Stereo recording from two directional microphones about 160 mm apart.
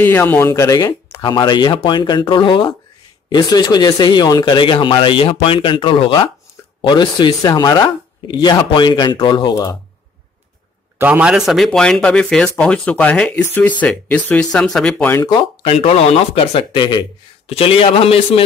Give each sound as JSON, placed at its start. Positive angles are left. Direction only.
{"t": 0.0, "sound": "speech", "side_deg": 15}
{"t": 11.0, "sound": "speech", "side_deg": -10}
{"t": 15.1, "sound": "speech", "side_deg": 25}